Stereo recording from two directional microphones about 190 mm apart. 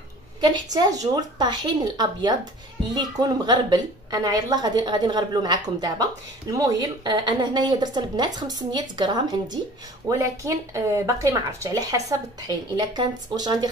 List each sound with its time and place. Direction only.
0.4 s speech: 20° right (ahead or behind)